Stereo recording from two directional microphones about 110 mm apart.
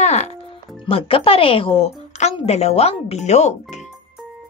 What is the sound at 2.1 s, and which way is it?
Speech, 85° left.